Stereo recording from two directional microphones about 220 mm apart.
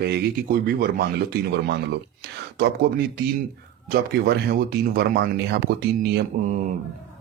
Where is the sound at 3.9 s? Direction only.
45° right (ahead or behind).